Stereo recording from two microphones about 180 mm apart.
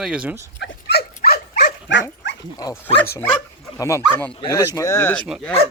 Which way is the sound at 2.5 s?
20° left (ahead or behind).